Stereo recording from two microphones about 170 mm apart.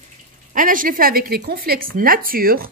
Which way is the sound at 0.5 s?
55° right (ahead or behind).